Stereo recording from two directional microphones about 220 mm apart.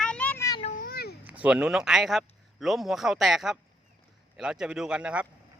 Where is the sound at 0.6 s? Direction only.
40° left (ahead or behind).